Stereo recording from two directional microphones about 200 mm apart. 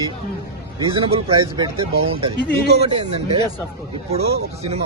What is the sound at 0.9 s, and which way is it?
Speech, 25° right (ahead or behind).